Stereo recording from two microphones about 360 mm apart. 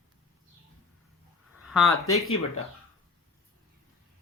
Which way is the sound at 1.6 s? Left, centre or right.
Centre.